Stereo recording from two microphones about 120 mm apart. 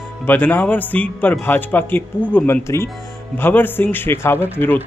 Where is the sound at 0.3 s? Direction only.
15° left (ahead or behind).